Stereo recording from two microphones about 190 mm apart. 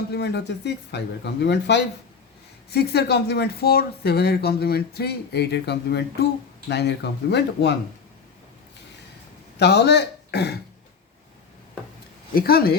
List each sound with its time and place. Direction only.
0.1 s speech: 60° left (ahead or behind)
9.6 s speech: 60° left (ahead or behind)
12.3 s speech: 50° left (ahead or behind)